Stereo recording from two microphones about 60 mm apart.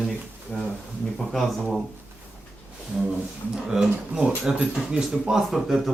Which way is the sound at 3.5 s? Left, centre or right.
Centre.